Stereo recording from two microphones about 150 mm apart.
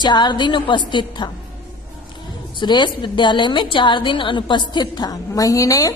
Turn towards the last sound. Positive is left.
turn(degrees=20)  # may be behind; listen again after turning